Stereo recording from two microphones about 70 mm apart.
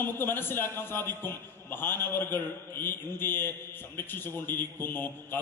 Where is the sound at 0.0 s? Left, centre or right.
Left.